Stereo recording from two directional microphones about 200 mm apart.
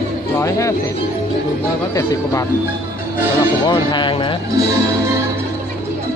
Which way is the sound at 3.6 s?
25° left (ahead or behind).